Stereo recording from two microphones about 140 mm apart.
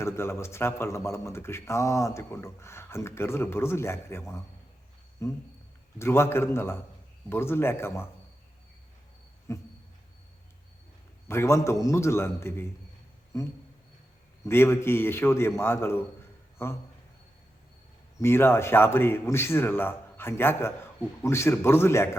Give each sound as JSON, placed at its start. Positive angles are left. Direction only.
{"t": 0.0, "sound": "a man's voice", "side_deg": 20}
{"t": 9.5, "sound": "a man's voice", "side_deg": 20}
{"t": 11.3, "sound": "a man's voice", "side_deg": 20}
{"t": 18.2, "sound": "a man's voice", "side_deg": 15}